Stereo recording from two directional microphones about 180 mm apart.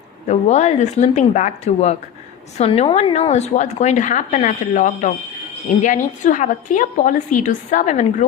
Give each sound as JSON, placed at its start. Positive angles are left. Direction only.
{"t": 0.3, "sound": "a woman's voice", "side_deg": 40}